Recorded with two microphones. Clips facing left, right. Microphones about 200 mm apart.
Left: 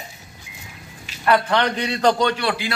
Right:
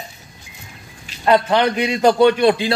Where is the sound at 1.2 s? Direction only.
15° right (ahead or behind).